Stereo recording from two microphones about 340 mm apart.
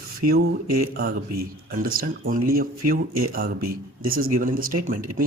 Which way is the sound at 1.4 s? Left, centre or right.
Right.